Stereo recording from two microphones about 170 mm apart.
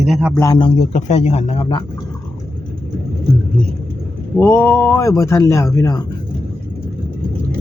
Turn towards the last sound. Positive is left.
turn(degrees=20)  # may be behind; listen again after turning